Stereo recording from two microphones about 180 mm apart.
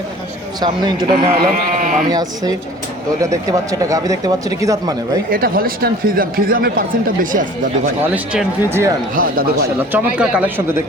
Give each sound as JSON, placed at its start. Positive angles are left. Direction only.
{"t": 0.6, "sound": "speech", "side_deg": -25}
{"t": 1.5, "sound": "speech", "side_deg": -45}
{"t": 2.0, "sound": "speech", "side_deg": -20}
{"t": 5.3, "sound": "speech", "side_deg": -55}
{"t": 8.1, "sound": "speech", "side_deg": -5}
{"t": 9.1, "sound": "speech", "side_deg": -50}
{"t": 9.9, "sound": "speech", "side_deg": -5}